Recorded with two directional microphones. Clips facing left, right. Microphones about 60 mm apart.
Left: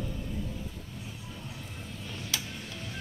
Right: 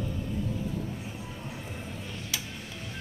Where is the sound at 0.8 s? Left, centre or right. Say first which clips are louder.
Right 6 dB; right.